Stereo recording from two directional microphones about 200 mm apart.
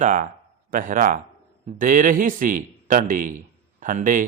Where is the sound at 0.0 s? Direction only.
40° right (ahead or behind).